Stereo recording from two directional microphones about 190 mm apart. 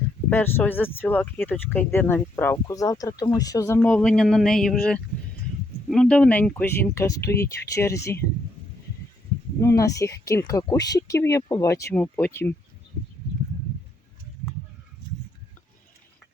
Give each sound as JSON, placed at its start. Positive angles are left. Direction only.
{"t": 0.3, "sound": "speech", "side_deg": 10}
{"t": 3.8, "sound": "speech", "side_deg": 5}
{"t": 9.6, "sound": "speech", "side_deg": 15}